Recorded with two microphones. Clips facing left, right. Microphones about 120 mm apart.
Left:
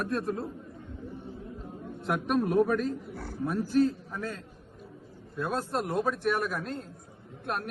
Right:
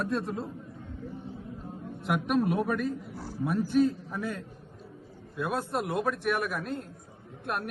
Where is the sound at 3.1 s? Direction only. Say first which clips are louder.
Left 1 dB; 55° left (ahead or behind).